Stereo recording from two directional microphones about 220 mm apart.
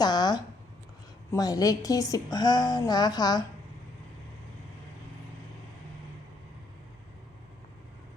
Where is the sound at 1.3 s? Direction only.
15° left (ahead or behind).